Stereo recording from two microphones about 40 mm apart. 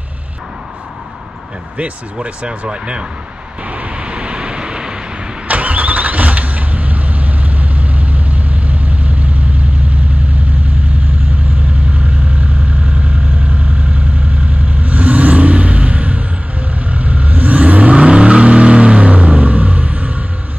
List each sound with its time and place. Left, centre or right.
2.2 s speech: right
3.6 s vehicle: right
5.5 s vehicle: right
11.9 s vehicle: right